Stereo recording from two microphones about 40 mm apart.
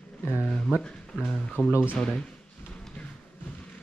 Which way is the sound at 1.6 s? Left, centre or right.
Left.